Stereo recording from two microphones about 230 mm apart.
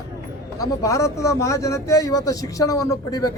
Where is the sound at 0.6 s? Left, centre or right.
Centre.